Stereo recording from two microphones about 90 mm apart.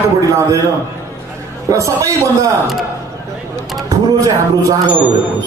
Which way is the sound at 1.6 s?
35° right (ahead or behind).